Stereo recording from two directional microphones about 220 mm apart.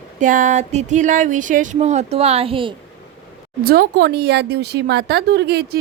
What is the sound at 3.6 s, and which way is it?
Speech, 45° right (ahead or behind).